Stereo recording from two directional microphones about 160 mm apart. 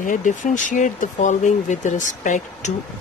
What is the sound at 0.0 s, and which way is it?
Speech, 55° left (ahead or behind).